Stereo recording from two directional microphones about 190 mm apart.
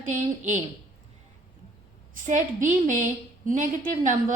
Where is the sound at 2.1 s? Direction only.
40° right (ahead or behind).